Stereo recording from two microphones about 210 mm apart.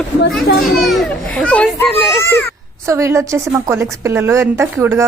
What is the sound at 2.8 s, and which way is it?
A woman's voice, 15° right (ahead or behind).